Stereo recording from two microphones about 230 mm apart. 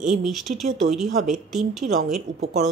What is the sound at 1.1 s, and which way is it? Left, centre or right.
Speech, right.